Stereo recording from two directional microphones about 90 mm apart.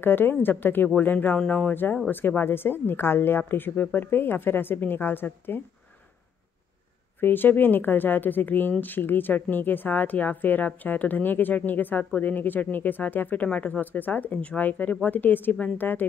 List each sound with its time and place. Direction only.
0.0 s speech: 25° left (ahead or behind)
7.2 s speech: 20° left (ahead or behind)